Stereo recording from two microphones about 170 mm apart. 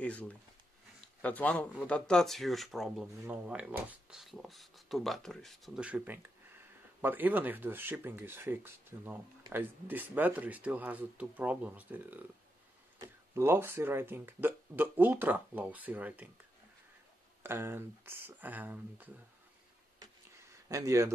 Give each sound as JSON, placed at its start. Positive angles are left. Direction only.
{"t": 0.0, "sound": "speech", "side_deg": 5}
{"t": 13.3, "sound": "speech", "side_deg": -15}
{"t": 17.4, "sound": "speech", "side_deg": -15}
{"t": 20.0, "sound": "a sound", "side_deg": -20}